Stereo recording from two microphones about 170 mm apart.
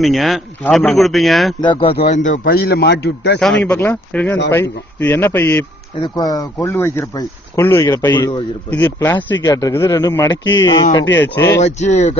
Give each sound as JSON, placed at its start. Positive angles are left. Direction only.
{"t": 0.0, "sound": "speech", "side_deg": 0}
{"t": 1.6, "sound": "speech", "side_deg": 30}
{"t": 2.0, "sound": "a man's voice", "side_deg": 45}
{"t": 3.6, "sound": "speech", "side_deg": 10}
{"t": 5.9, "sound": "speech", "side_deg": 25}
{"t": 11.6, "sound": "speech", "side_deg": 40}